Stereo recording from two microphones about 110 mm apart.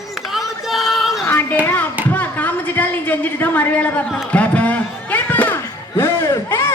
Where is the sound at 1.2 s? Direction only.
25° left (ahead or behind).